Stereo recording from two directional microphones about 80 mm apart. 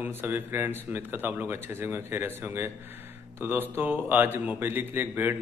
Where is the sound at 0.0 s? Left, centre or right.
Right.